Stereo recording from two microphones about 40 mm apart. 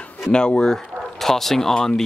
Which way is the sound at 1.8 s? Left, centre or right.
Centre.